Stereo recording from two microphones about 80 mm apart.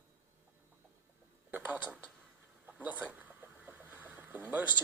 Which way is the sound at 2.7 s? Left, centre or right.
Right.